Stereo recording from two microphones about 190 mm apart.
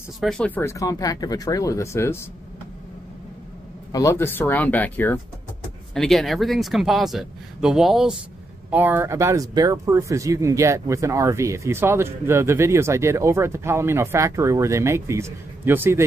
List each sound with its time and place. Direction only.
0.2 s speech: 5° left (ahead or behind)
3.9 s speech: 15° left (ahead or behind); by 16.1 s 10° right (ahead or behind)